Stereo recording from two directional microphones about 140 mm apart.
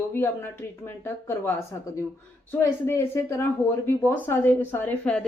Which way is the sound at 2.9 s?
20° left (ahead or behind).